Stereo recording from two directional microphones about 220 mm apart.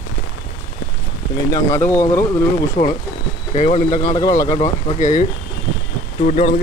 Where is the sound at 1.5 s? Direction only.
10° left (ahead or behind).